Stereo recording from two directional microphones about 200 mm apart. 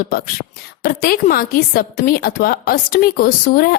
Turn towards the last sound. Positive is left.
turn(degrees=45)  # may be behind; listen again after turning